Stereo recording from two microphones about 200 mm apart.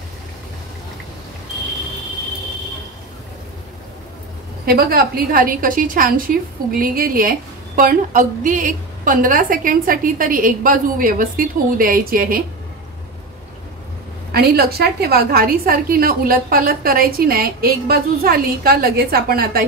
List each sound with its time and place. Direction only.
4.6 s a woman's voice: 50° right (ahead or behind)
14.3 s a woman's voice: 50° right (ahead or behind)